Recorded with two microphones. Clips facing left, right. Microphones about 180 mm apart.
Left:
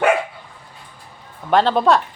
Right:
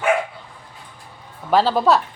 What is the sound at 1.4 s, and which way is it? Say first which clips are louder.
Speech: left 1 dB; 5° right (ahead or behind).